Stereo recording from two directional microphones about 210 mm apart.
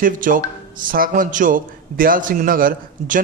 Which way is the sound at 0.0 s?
40° right (ahead or behind).